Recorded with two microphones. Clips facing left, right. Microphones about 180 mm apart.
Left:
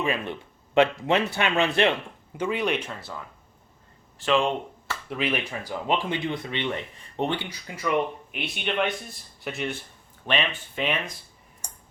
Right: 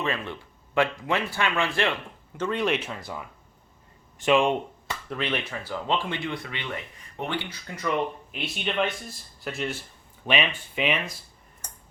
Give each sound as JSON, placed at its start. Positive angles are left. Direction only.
{"t": 0.0, "sound": "speech", "side_deg": 15}
{"t": 2.4, "sound": "speech", "side_deg": 5}
{"t": 4.3, "sound": "speech", "side_deg": -15}
{"t": 5.0, "sound": "speech", "side_deg": 5}
{"t": 7.8, "sound": "speech", "side_deg": 0}